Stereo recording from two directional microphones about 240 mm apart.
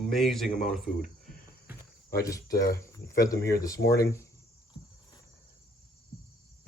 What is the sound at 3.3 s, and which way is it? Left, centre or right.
Speech, left.